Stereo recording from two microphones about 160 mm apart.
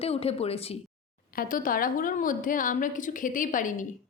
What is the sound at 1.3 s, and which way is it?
A woman's voice, 60° left (ahead or behind).